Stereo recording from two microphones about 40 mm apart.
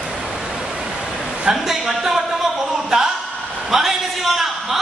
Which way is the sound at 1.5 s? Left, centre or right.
Centre.